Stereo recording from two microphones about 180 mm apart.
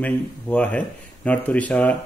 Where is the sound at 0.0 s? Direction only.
10° left (ahead or behind).